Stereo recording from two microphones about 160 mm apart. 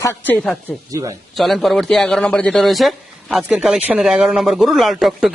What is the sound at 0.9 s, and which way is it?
Speech, 20° right (ahead or behind).